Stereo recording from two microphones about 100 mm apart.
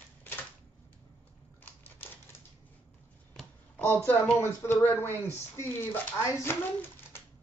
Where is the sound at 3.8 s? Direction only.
20° left (ahead or behind).